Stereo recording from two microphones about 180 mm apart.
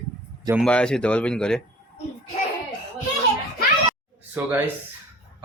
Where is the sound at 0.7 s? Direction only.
5° left (ahead or behind).